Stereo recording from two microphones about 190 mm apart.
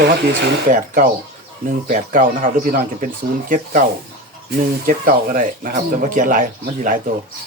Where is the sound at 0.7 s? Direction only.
45° right (ahead or behind).